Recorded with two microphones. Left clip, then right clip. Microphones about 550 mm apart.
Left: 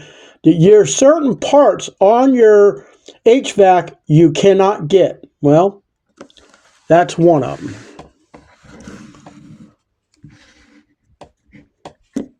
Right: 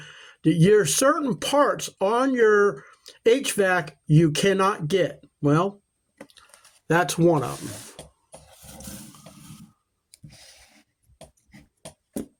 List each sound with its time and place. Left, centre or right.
0.0 s speech: right
6.8 s speech: right